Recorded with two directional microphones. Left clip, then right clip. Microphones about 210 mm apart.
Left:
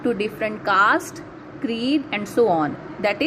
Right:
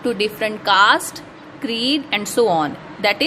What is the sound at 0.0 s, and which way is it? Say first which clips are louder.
A woman's voice: right 3 dB; 30° right (ahead or behind).